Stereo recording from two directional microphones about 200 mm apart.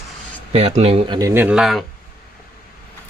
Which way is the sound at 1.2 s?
15° right (ahead or behind).